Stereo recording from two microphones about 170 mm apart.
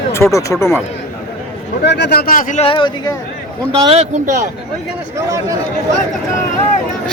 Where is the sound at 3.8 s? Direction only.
35° right (ahead or behind).